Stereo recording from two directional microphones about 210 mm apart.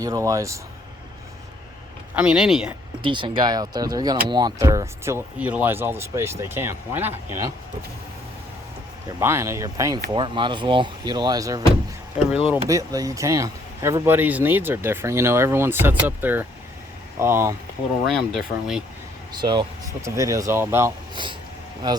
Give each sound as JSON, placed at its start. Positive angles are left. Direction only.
{"t": 0.0, "sound": "speech", "side_deg": -15}
{"t": 2.1, "sound": "speech", "side_deg": -5}
{"t": 3.0, "sound": "speech", "side_deg": -25}
{"t": 9.2, "sound": "speech", "side_deg": -10}
{"t": 18.3, "sound": "speech", "side_deg": 0}
{"t": 19.3, "sound": "speech", "side_deg": -20}